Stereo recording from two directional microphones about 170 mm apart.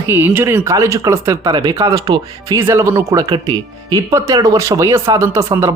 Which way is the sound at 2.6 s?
15° right (ahead or behind).